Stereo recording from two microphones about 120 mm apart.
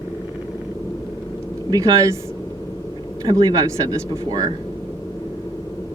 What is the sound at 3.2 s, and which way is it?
Speech, 35° right (ahead or behind).